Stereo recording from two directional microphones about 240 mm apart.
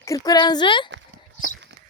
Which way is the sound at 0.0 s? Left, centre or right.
Centre.